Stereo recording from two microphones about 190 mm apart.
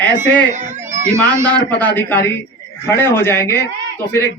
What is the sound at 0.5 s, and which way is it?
Baby cry, 40° right (ahead or behind).